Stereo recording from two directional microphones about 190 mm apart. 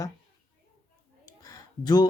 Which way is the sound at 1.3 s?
20° left (ahead or behind).